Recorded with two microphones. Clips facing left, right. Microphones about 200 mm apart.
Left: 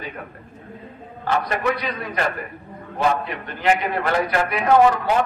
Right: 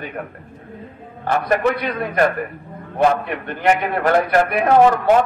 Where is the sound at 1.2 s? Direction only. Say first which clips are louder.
Right 4 dB; 55° right (ahead or behind).